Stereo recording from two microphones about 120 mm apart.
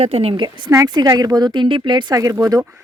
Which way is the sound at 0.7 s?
30° right (ahead or behind).